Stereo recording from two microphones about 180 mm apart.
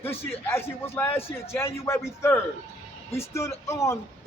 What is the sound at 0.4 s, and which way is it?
A man's voice, 10° left (ahead or behind).